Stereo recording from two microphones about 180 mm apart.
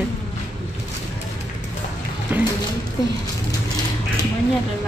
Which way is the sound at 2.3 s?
10° right (ahead or behind).